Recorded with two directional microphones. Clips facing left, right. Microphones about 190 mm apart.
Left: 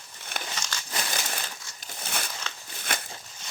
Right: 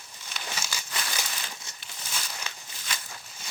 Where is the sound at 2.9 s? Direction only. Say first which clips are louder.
Left 6 dB; 55° left (ahead or behind).